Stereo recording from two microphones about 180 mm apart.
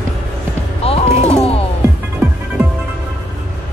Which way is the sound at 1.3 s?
35° left (ahead or behind).